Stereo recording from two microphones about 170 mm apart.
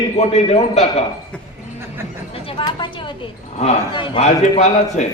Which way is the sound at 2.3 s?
30° left (ahead or behind).